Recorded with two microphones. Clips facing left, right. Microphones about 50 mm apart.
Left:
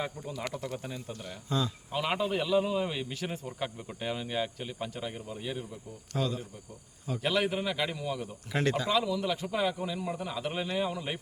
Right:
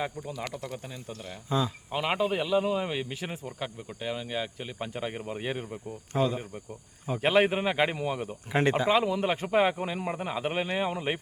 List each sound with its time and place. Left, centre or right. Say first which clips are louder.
0.0 s speech: right 2 dB; centre
1.5 s speech: right 3 dB; centre
4.8 s speech: right 5 dB; right
6.1 s speech: right 5 dB; right